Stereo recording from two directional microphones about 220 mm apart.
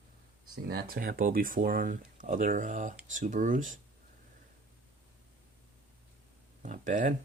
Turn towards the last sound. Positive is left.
turn(degrees=-35)  # may be behind; listen again after turning